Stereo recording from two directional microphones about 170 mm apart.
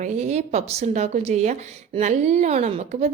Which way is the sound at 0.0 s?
40° right (ahead or behind).